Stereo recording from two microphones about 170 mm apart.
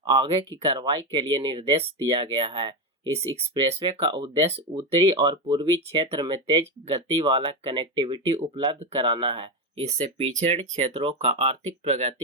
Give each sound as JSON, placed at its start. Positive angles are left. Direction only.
{"t": 0.0, "sound": "speech", "side_deg": -30}